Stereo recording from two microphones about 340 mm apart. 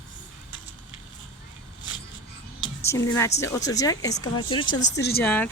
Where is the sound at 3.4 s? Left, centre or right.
Centre.